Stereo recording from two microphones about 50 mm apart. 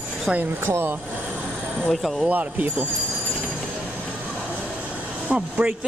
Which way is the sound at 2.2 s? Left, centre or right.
Right.